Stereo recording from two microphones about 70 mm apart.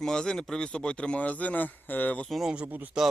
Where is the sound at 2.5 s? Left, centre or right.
Centre.